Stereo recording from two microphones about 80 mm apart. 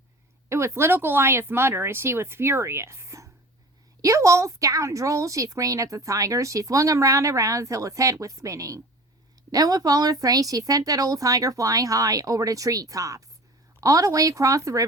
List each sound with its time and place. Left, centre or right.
0.4 s a woman's voice: right